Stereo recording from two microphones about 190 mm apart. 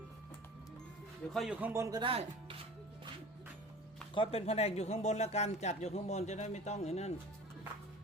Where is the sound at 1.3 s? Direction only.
5° right (ahead or behind).